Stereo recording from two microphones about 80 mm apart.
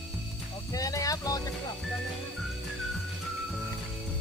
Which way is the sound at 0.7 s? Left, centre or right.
Left.